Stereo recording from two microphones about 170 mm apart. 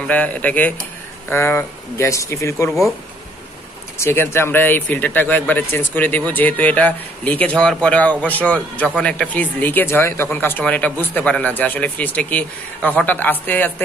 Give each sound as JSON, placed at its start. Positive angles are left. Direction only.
{"t": 0.0, "sound": "speech", "side_deg": 10}
{"t": 4.0, "sound": "speech", "side_deg": 15}